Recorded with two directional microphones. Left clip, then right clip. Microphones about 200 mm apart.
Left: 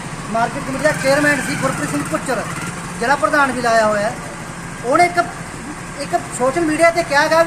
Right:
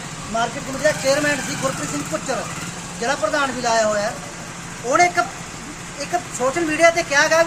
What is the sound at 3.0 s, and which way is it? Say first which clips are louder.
A man's voice: left 5 dB; centre (ahead or behind).